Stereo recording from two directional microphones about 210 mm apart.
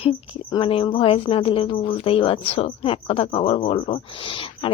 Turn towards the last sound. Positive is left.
turn(degrees=25)  # may be behind; listen again after turning